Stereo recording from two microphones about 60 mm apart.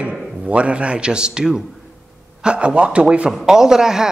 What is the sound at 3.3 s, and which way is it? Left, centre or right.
Speech, centre.